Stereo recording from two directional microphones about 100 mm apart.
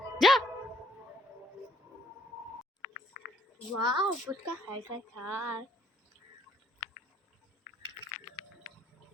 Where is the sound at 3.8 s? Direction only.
45° right (ahead or behind).